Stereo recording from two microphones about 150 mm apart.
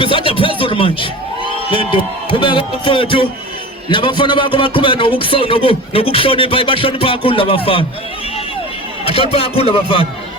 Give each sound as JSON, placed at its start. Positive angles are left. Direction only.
{"t": 0.0, "sound": "music", "side_deg": 35}
{"t": 1.7, "sound": "speech", "side_deg": 35}
{"t": 9.0, "sound": "speech", "side_deg": 40}